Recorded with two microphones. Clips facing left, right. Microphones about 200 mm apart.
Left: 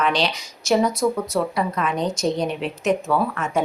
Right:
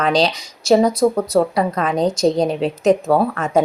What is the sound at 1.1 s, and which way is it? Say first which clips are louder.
A woman's voice: right 6 dB; 50° right (ahead or behind).